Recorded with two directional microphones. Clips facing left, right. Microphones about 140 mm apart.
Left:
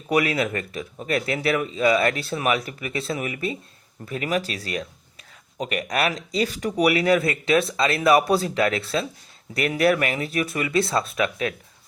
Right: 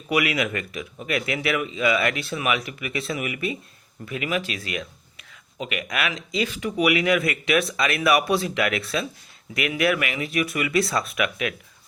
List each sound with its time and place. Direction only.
0.1 s speech: 35° left (ahead or behind)